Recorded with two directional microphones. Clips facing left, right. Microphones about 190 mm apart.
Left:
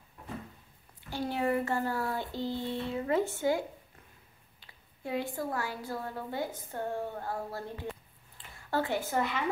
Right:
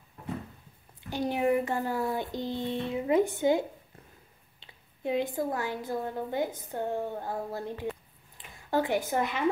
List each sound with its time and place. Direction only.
1.1 s a child's voice: 15° right (ahead or behind)